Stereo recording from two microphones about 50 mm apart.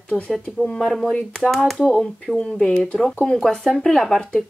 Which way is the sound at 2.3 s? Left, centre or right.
Centre.